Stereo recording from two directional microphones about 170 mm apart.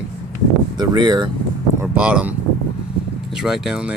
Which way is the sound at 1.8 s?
5° right (ahead or behind).